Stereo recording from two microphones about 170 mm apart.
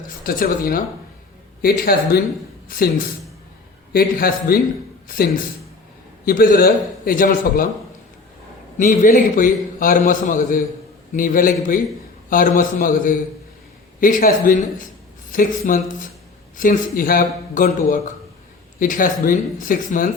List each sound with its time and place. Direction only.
0.3 s a man's voice: 55° left (ahead or behind)
3.9 s a man's voice: 60° left (ahead or behind)
8.8 s a man's voice: 50° left (ahead or behind)